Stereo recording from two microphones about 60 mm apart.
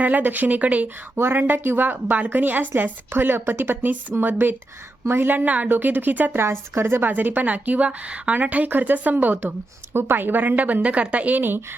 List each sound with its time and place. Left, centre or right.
0.0 s speech: right
1.1 s a woman's voice: right
6.3 s a woman's voice: right